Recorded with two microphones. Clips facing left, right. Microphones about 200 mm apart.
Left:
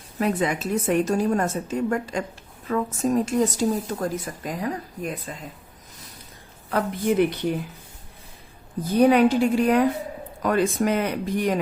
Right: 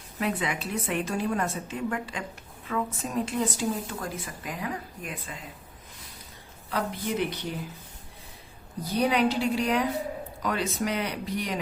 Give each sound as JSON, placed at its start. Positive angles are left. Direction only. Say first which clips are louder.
{"t": 0.2, "sound": "a woman's voice", "louder": "left 6 dB", "side_deg": 40}
{"t": 6.7, "sound": "a woman's voice", "louder": "left 7 dB", "side_deg": 50}
{"t": 8.8, "sound": "a woman's voice", "louder": "left 8 dB", "side_deg": 50}